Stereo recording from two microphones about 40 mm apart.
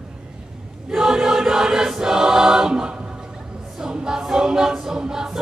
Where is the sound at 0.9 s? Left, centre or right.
Centre.